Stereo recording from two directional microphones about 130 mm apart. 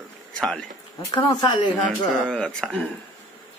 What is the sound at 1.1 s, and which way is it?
Speech, 35° left (ahead or behind).